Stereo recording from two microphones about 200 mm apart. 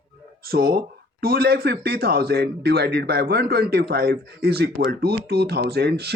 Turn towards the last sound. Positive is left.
turn(degrees=-55)  # may be behind; listen again after turning